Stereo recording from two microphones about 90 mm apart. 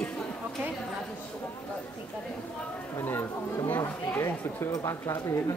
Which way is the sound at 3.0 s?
25° left (ahead or behind).